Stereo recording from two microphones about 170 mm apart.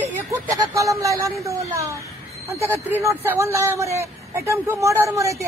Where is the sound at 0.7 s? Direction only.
20° right (ahead or behind).